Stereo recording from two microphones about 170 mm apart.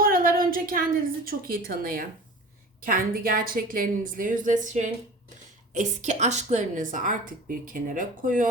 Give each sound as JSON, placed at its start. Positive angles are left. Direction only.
{"t": 0.0, "sound": "a woman's voice", "side_deg": -55}